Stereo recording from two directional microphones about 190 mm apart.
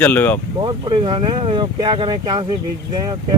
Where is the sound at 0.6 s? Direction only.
25° right (ahead or behind).